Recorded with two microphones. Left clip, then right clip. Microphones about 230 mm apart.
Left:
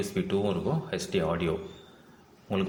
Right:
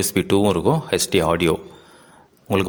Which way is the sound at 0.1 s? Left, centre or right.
Right.